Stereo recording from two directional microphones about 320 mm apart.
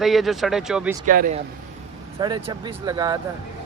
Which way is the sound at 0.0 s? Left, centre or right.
Centre.